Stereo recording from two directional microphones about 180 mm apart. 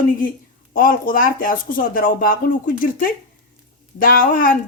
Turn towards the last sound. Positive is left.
turn(degrees=50)  # may be behind; listen again after turning